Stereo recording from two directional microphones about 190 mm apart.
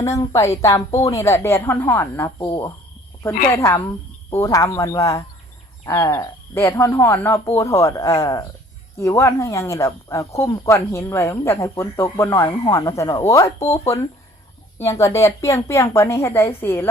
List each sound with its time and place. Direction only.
0.0 s speech: 15° left (ahead or behind)
2.5 s speech: 25° left (ahead or behind)
3.5 s speech: 15° left (ahead or behind)